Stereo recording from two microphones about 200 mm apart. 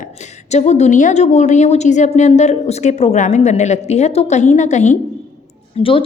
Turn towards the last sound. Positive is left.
turn(degrees=25)  # may be behind; listen again after turning